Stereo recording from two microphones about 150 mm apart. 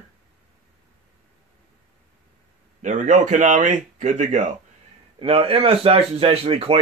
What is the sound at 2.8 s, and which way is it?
Speech, 55° right (ahead or behind).